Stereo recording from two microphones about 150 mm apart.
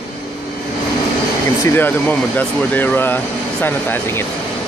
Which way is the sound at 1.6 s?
15° left (ahead or behind).